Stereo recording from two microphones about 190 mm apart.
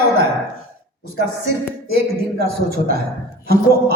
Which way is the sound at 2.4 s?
55° right (ahead or behind).